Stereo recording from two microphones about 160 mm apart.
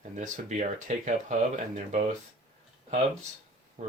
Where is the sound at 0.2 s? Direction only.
50° right (ahead or behind).